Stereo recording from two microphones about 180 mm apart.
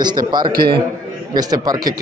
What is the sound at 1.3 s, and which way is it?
Speech, 20° right (ahead or behind).